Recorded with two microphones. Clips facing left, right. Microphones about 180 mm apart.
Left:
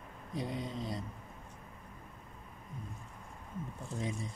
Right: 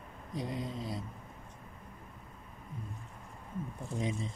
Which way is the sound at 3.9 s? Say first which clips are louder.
Right 3 dB; 20° right (ahead or behind).